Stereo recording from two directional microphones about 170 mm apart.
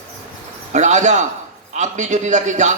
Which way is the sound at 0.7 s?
45° right (ahead or behind).